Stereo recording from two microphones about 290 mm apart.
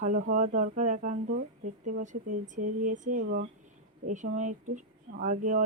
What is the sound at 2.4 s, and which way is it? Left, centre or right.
Speech, right.